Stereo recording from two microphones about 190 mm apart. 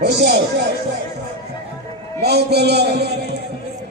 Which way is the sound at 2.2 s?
60° right (ahead or behind).